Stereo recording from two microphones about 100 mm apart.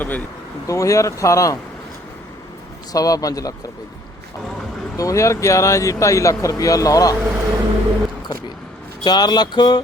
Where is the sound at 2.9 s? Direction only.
35° left (ahead or behind).